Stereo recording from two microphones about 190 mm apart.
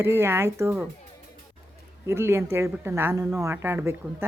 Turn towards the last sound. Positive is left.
turn(degrees=-10)  # may be behind; listen again after turning